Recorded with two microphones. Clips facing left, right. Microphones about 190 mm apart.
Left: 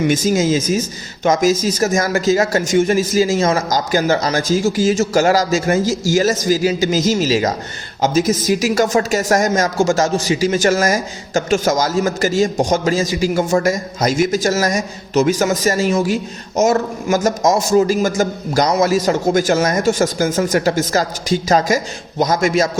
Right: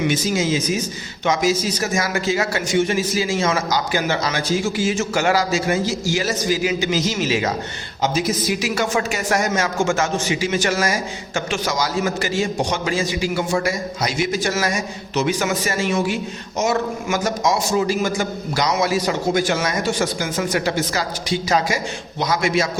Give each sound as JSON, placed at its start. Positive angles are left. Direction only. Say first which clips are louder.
{"t": 0.1, "sound": "speech", "louder": "left 5 dB", "side_deg": 45}